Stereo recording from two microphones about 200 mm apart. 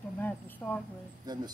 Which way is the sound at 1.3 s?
20° right (ahead or behind).